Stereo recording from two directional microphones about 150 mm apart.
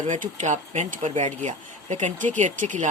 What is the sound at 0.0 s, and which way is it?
Speech, 55° right (ahead or behind).